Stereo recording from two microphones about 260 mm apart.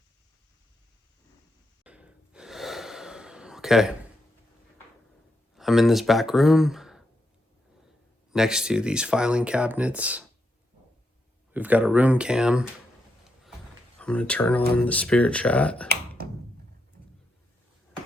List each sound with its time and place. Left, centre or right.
1.8 s gasp: centre
5.5 s speech: centre
8.3 s speech: centre
11.5 s speech: centre
14.0 s speech: centre
15.9 s finger snapping: right